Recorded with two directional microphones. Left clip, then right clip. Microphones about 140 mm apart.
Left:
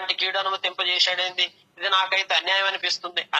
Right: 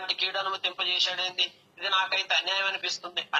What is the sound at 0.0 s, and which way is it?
A man's voice, 35° left (ahead or behind).